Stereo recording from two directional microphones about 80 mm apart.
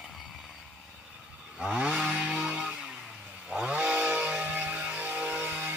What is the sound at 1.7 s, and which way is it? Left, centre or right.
Chainsaw, centre.